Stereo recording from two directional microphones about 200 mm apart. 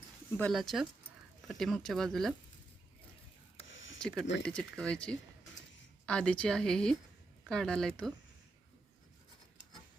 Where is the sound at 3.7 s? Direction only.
70° left (ahead or behind).